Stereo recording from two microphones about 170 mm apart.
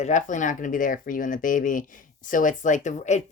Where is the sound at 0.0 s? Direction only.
45° left (ahead or behind).